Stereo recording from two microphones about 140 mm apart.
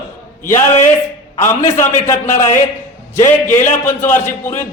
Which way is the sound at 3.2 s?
15° left (ahead or behind).